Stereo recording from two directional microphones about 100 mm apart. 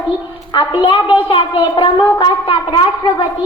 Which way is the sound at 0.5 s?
60° left (ahead or behind).